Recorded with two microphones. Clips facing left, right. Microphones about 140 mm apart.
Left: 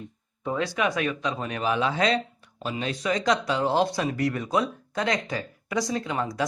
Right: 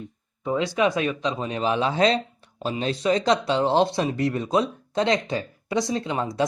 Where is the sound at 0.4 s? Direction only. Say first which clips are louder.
Right 4 dB; 20° right (ahead or behind).